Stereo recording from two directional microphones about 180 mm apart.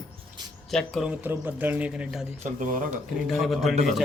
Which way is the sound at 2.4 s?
45° right (ahead or behind).